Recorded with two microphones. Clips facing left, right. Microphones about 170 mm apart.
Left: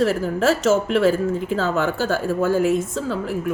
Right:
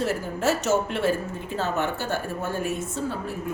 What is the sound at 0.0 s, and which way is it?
Speech, 90° left.